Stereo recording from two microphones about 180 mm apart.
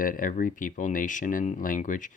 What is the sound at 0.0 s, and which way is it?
Speech, 50° left (ahead or behind).